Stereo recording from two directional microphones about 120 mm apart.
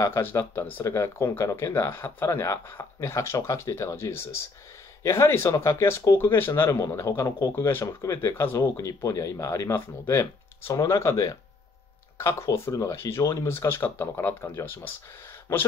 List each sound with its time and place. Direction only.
0.0 s speech: 20° left (ahead or behind)